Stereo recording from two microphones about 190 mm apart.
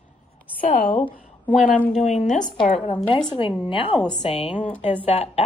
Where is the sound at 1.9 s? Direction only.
35° left (ahead or behind).